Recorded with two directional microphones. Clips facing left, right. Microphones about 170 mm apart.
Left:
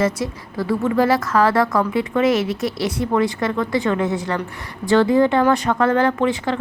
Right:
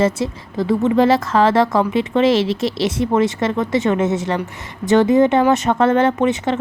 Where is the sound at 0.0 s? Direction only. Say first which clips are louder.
Right 3 dB; 25° right (ahead or behind).